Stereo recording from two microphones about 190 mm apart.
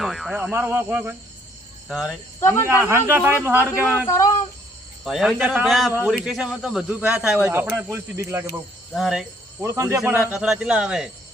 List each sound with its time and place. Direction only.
0.0 s a man's voice: centre (ahead or behind)
2.4 s speech: 15° left (ahead or behind)
2.6 s speech: 10° right (ahead or behind)
4.0 s speech: 20° left (ahead or behind)
5.0 s a man's voice: centre (ahead or behind)
8.9 s a man's voice: centre (ahead or behind)
9.6 s a man's voice: 15° right (ahead or behind)